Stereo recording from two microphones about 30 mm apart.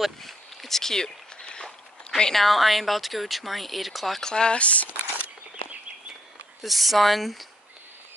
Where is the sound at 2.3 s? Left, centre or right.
Centre.